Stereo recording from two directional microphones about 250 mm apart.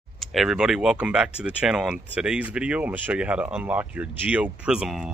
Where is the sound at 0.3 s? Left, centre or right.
Centre.